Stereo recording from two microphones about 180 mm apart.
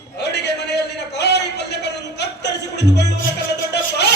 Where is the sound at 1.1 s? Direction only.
70° left (ahead or behind).